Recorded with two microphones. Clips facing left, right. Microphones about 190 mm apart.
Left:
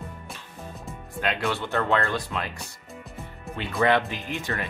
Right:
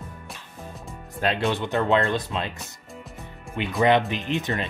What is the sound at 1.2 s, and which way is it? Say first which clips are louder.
Speech: right 3 dB; 25° right (ahead or behind).